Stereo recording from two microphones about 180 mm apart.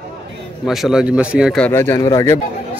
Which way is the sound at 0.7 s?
Centre (ahead or behind).